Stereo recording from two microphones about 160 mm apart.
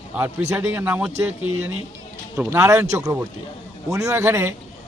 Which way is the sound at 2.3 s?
20° right (ahead or behind).